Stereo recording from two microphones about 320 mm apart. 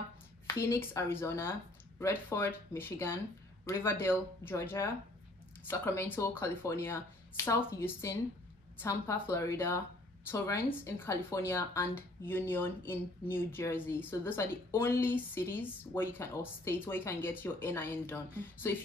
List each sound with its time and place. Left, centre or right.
0.5 s speech: centre